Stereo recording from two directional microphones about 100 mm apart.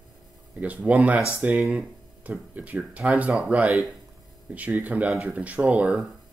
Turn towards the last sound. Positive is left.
turn(degrees=-10)  # may be behind; listen again after turning